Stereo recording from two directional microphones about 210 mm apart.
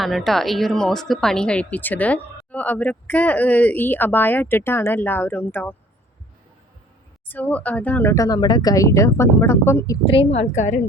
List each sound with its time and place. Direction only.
0.0 s speech: centre (ahead or behind)
7.3 s speech: 10° left (ahead or behind)
10.1 s a woman's voice: 30° left (ahead or behind)